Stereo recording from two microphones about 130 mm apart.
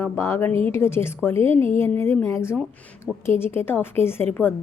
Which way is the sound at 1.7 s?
20° left (ahead or behind).